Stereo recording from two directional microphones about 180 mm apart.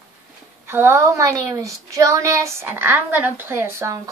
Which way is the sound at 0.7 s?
15° right (ahead or behind).